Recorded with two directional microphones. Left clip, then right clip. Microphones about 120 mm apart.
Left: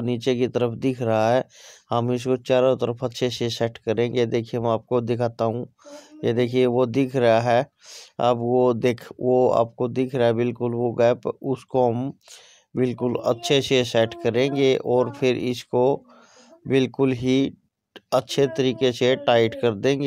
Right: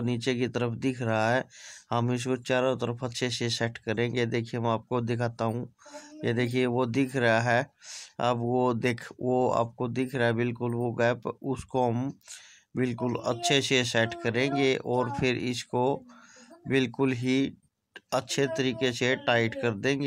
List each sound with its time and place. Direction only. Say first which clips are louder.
0.0 s speech: left 7 dB; 30° left (ahead or behind)